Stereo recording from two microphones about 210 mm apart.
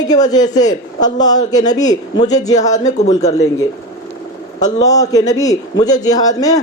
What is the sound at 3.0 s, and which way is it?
Speech, 30° left (ahead or behind).